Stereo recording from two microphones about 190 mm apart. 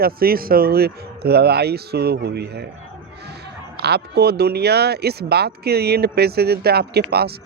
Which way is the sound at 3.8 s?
60° right (ahead or behind).